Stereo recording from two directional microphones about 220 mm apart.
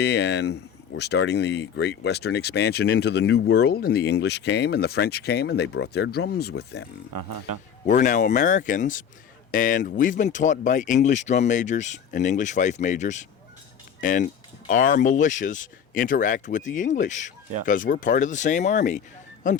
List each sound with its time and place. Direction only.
0.0 s speech: 50° left (ahead or behind)
7.9 s speech: 35° left (ahead or behind)